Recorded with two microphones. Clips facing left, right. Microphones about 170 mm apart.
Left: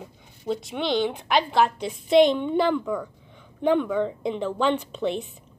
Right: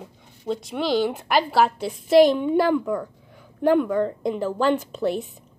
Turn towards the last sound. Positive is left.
turn(degrees=-5)  # may be behind; listen again after turning